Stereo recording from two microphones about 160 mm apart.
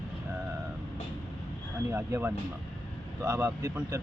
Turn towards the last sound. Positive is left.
turn(degrees=-15)  # may be behind; listen again after turning